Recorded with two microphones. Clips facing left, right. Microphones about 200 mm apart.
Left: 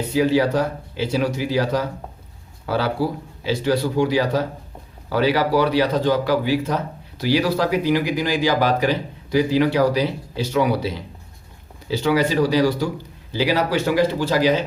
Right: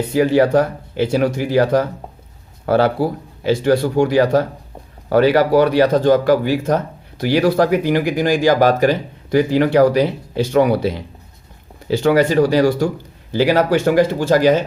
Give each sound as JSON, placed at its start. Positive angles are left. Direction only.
{"t": 0.1, "sound": "speech", "side_deg": -50}